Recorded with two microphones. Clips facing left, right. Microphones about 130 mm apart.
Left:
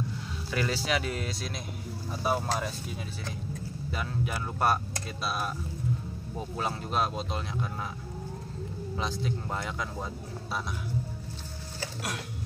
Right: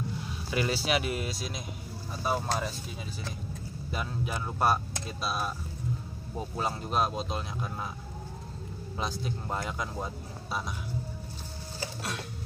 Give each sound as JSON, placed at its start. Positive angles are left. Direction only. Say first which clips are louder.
{"t": 0.5, "sound": "speech", "louder": "right 1 dB", "side_deg": -15}
{"t": 4.3, "sound": "speech", "louder": "right 1 dB", "side_deg": -5}
{"t": 8.9, "sound": "speech", "louder": "left 1 dB", "side_deg": -5}